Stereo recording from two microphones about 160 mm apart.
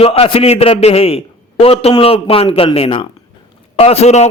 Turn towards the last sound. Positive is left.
turn(degrees=40)  # may be behind; listen again after turning